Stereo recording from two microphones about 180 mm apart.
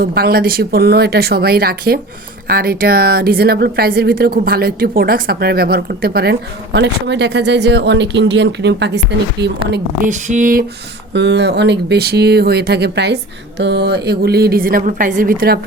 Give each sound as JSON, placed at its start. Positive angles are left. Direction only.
{"t": 0.0, "sound": "a woman's voice", "side_deg": -55}
{"t": 6.7, "sound": "speech", "side_deg": -75}
{"t": 10.1, "sound": "a sound", "side_deg": -45}
{"t": 11.1, "sound": "a woman's voice", "side_deg": -75}